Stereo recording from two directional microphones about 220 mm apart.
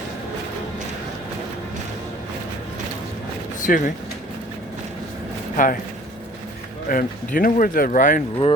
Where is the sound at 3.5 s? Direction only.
35° left (ahead or behind).